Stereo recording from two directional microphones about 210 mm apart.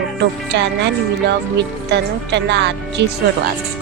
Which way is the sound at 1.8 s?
55° right (ahead or behind).